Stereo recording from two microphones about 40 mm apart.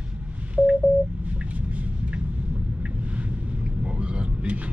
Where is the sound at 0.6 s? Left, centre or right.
Right.